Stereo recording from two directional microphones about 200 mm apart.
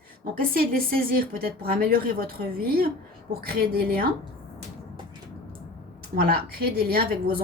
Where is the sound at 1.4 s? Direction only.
50° right (ahead or behind).